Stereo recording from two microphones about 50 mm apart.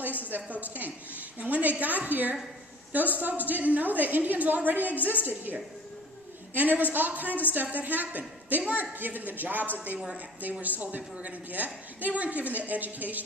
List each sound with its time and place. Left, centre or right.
0.3 s a woman's voice: right